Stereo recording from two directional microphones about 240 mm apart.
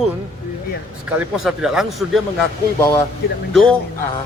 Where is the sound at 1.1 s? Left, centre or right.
Centre.